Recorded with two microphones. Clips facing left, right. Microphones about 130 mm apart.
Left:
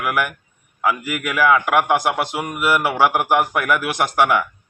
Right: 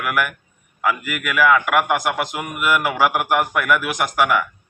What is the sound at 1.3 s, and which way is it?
A man's voice, 25° left (ahead or behind).